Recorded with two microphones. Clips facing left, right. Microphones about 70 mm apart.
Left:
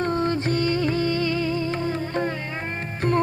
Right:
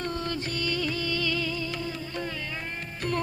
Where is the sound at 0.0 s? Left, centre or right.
Left.